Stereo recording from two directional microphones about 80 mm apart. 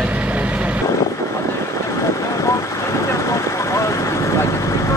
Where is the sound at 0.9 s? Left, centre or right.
Left.